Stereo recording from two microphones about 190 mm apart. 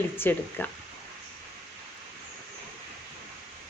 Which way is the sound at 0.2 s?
10° left (ahead or behind).